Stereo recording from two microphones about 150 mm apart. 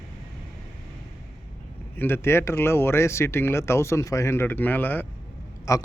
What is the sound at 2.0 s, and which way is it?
A man's voice, 15° left (ahead or behind).